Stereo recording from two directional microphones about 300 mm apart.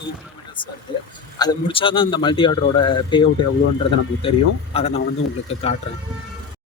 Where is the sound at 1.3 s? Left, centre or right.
Centre.